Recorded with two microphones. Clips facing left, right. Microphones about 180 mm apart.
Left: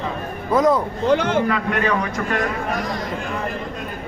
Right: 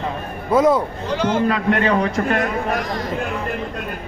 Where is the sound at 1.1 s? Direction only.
55° left (ahead or behind).